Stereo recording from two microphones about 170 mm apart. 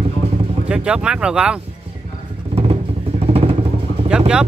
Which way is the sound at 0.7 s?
5° right (ahead or behind).